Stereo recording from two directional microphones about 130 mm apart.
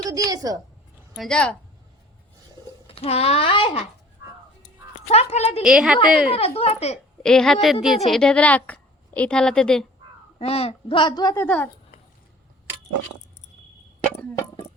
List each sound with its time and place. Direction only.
0.0 s a woman's voice: 30° right (ahead or behind)
1.1 s a woman's voice: 5° left (ahead or behind)
2.8 s a child's voice: 50° left (ahead or behind)
5.0 s speech: 55° left (ahead or behind)
5.6 s a woman's voice: 5° right (ahead or behind)
6.3 s a child's voice: 50° left (ahead or behind)
7.2 s a woman's voice: 5° left (ahead or behind)
10.3 s a child's voice: 50° left (ahead or behind); by 11.3 s 30° left (ahead or behind)
11.3 s speech: 15° left (ahead or behind)
14.1 s speech: 10° left (ahead or behind)